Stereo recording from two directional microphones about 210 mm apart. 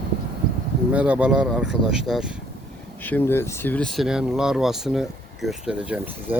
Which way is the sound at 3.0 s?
10° left (ahead or behind).